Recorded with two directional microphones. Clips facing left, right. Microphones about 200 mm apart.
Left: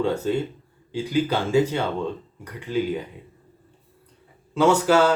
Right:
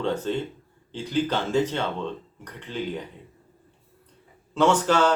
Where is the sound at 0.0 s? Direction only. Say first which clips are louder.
Left 3 dB; 10° left (ahead or behind).